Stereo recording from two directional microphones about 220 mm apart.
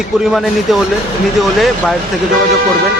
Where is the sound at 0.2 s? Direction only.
Centre (ahead or behind).